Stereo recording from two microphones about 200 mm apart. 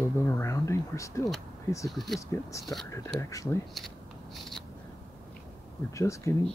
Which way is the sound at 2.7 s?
15° left (ahead or behind).